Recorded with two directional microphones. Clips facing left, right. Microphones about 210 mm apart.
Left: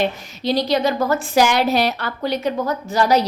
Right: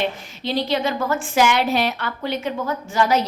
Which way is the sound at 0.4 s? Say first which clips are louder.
Left 4 dB; 40° left (ahead or behind).